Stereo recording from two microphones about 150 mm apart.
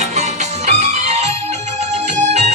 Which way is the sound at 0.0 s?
50° right (ahead or behind).